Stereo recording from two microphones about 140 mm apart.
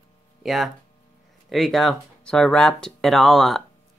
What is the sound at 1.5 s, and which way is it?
Speech, centre (ahead or behind).